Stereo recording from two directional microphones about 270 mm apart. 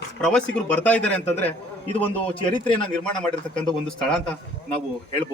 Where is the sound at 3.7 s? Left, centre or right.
Centre.